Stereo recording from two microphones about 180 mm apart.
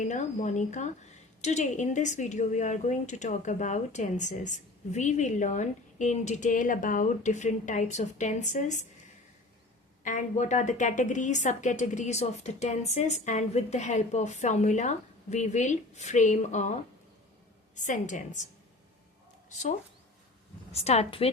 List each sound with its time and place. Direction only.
0.0 s a woman's voice: 40° left (ahead or behind)
10.0 s a woman's voice: 45° left (ahead or behind)
17.7 s speech: 45° left (ahead or behind)
19.5 s speech: 45° left (ahead or behind)
20.7 s a woman's voice: 35° left (ahead or behind)